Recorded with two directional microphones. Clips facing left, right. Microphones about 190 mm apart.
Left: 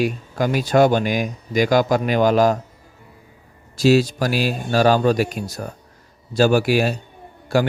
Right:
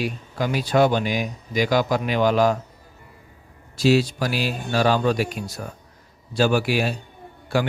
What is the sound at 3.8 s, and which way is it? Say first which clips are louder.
Speech: left 3 dB; 45° left (ahead or behind).